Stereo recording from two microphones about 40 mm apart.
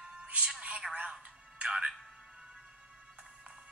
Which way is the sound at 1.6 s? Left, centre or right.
Right.